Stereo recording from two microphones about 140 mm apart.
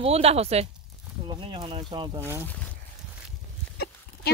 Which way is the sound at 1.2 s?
35° right (ahead or behind).